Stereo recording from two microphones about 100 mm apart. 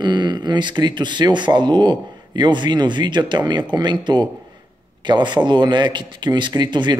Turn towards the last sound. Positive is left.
turn(degrees=-50)  # may be behind; listen again after turning